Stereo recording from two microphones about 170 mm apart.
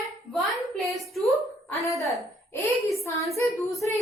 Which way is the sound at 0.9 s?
Centre (ahead or behind).